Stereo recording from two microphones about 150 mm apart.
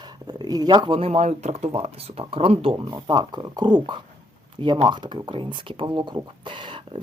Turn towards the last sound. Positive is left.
turn(degrees=-30)  # may be behind; listen again after turning